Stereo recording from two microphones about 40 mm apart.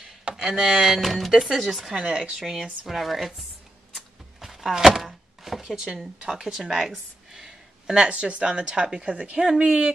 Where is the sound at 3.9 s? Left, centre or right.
Centre.